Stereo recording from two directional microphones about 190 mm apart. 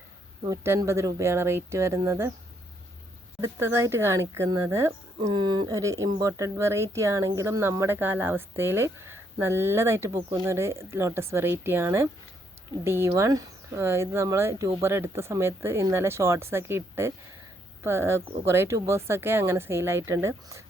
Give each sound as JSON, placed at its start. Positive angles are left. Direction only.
{"t": 0.4, "sound": "speech", "side_deg": -15}
{"t": 3.4, "sound": "speech", "side_deg": -15}